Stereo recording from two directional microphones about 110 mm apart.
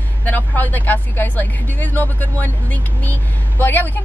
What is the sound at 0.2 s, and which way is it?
Speech, 15° left (ahead or behind).